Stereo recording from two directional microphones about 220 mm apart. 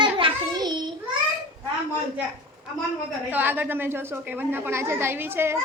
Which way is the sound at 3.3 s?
10° right (ahead or behind).